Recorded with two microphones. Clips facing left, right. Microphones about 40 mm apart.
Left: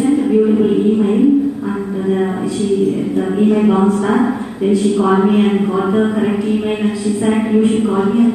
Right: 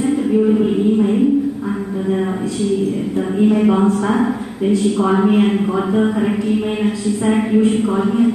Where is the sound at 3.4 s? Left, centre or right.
Centre.